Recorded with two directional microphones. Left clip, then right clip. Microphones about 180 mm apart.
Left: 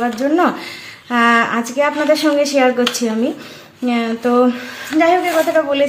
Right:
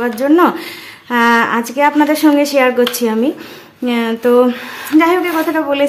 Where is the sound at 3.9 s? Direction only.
40° right (ahead or behind).